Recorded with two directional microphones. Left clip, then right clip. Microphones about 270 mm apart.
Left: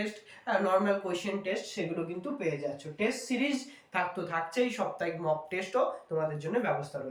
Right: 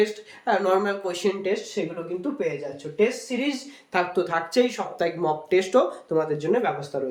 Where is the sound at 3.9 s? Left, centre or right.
Right.